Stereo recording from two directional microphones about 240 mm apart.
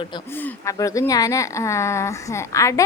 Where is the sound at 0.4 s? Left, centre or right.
Centre.